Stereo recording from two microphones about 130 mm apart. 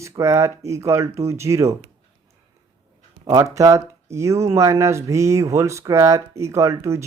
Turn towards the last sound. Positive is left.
turn(degrees=-20)  # may be behind; listen again after turning